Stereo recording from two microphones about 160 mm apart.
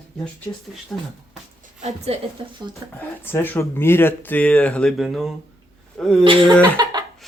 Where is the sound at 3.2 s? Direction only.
15° left (ahead or behind).